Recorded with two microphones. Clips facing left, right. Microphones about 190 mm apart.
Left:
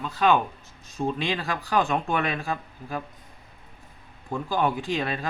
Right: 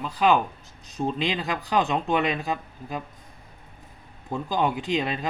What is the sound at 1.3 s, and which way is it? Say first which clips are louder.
Speech: even; 20° right (ahead or behind).